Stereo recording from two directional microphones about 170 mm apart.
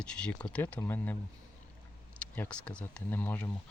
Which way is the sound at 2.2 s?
10° left (ahead or behind).